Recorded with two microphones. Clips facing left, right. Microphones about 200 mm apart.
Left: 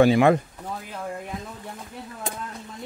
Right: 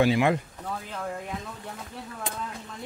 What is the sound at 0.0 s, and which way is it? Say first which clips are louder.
Speech: left 5 dB; 50° left (ahead or behind).